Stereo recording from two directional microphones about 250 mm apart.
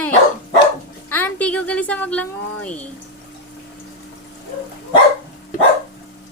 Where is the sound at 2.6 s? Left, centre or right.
Centre.